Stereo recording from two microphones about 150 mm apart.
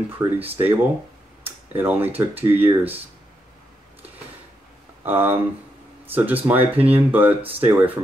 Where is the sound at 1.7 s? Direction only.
15° right (ahead or behind).